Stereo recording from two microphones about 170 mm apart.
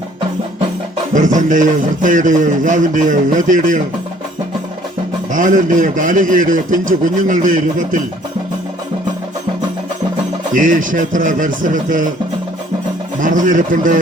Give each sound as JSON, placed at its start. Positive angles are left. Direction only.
{"t": 1.1, "sound": "a man's voice", "side_deg": -50}
{"t": 5.3, "sound": "a man's voice", "side_deg": -50}
{"t": 10.5, "sound": "a man's voice", "side_deg": -50}
{"t": 13.1, "sound": "a man's voice", "side_deg": -50}